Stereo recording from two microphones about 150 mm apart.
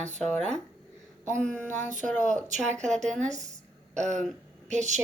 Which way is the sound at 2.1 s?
55° right (ahead or behind).